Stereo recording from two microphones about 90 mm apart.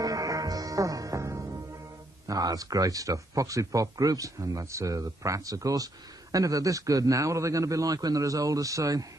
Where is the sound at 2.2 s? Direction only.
40° right (ahead or behind).